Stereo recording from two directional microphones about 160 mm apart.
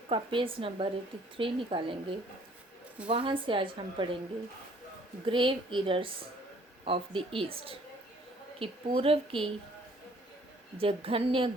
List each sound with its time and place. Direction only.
0.1 s a woman's voice: 35° right (ahead or behind)
5.2 s a woman's voice: 30° right (ahead or behind)
10.8 s a woman's voice: 35° right (ahead or behind)